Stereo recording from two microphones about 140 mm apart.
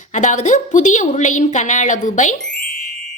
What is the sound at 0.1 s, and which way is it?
A woman's voice, 60° left (ahead or behind).